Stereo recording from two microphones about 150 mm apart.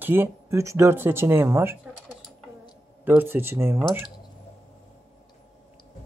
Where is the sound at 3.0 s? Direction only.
15° right (ahead or behind).